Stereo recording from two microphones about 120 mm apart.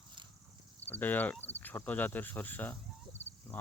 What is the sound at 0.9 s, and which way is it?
Speech, 15° left (ahead or behind).